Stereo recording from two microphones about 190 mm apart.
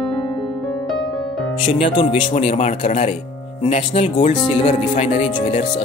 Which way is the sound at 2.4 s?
40° left (ahead or behind).